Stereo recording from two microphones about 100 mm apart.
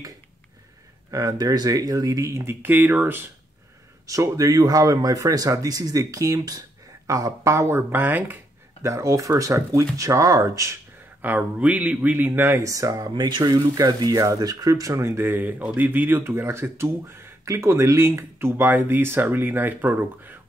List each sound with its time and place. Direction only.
1.1 s speech: 40° right (ahead or behind); by 3.3 s 20° right (ahead or behind)
4.0 s speech: 35° right (ahead or behind)
8.8 s speech: 30° right (ahead or behind)
11.1 s speech: 15° right (ahead or behind); by 13.1 s 35° right (ahead or behind)
13.1 s speech: 50° right (ahead or behind); by 20.3 s 20° right (ahead or behind)